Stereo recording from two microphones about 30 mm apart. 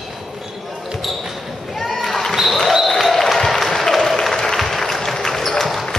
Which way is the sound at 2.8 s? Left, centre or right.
Centre.